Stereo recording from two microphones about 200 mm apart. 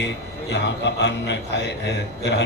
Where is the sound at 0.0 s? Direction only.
60° left (ahead or behind).